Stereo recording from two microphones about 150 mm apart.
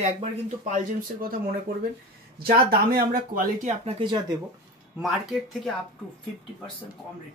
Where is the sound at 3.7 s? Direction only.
40° right (ahead or behind).